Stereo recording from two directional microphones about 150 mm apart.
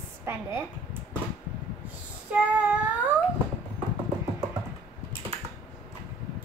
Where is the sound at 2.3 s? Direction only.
10° right (ahead or behind).